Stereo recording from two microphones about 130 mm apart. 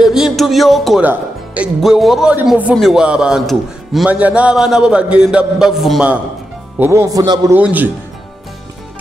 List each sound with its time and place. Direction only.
0.0 s speech: 5° right (ahead or behind)
1.0 s music: 10° right (ahead or behind)
1.8 s a man's voice: centre (ahead or behind)
6.8 s speech: 20° right (ahead or behind)
7.5 s a man's voice: 15° right (ahead or behind)